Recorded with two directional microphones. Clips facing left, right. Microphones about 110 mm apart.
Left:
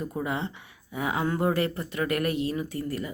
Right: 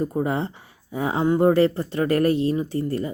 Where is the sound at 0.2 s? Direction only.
35° right (ahead or behind).